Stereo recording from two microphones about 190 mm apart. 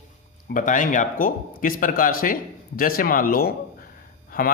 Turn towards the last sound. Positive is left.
turn(degrees=50)  # may be behind; listen again after turning